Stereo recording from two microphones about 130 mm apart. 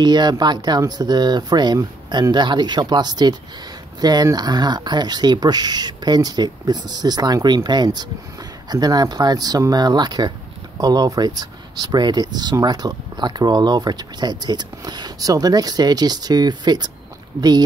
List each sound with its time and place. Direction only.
0.0 s speech: 35° right (ahead or behind)